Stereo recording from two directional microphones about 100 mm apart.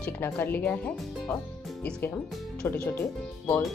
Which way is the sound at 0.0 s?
20° left (ahead or behind).